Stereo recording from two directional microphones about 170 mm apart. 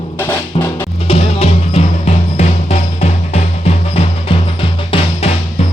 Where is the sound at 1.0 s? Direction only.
40° left (ahead or behind).